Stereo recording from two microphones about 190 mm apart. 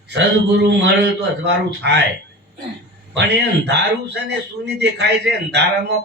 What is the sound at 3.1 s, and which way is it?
A man's voice, 65° right (ahead or behind).